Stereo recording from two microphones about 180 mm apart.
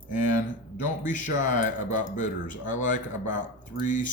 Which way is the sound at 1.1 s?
45° left (ahead or behind).